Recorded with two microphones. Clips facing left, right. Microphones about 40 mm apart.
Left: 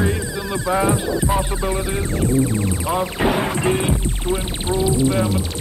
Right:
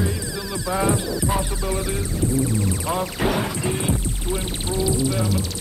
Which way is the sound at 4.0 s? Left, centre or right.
Left.